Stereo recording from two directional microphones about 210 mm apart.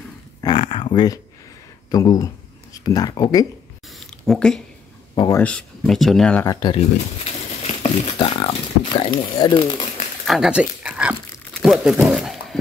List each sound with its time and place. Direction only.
0.4 s a sound: 25° left (ahead or behind)
1.9 s speech: 15° left (ahead or behind)
4.3 s speech: 5° left (ahead or behind)
5.1 s speech: 20° left (ahead or behind)
5.4 s speech: 5° left (ahead or behind)
7.2 s speech: 30° left (ahead or behind)
10.2 s speech: centre (ahead or behind)